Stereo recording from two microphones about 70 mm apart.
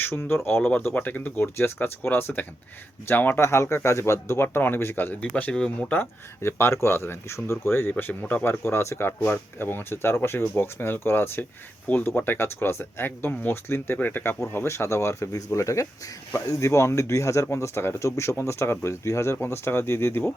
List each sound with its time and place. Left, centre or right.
0.0 s speech: left
0.6 s speech: left
5.3 s speech: centre
5.9 s speech: left
8.6 s speech: left
14.5 s speech: left